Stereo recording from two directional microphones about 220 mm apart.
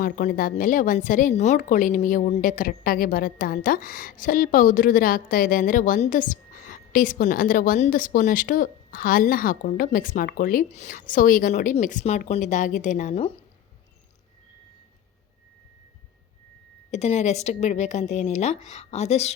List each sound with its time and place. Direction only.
0.0 s a woman's voice: 40° left (ahead or behind)
16.9 s a woman's voice: 30° left (ahead or behind)